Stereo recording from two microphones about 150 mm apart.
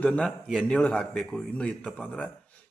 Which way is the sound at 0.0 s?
5° left (ahead or behind).